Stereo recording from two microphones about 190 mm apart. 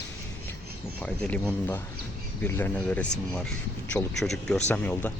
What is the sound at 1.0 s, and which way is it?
Speech, 5° left (ahead or behind).